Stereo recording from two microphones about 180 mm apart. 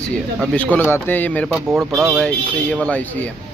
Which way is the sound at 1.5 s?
5° right (ahead or behind).